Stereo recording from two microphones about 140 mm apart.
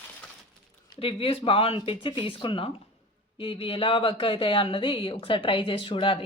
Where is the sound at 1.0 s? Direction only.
40° left (ahead or behind).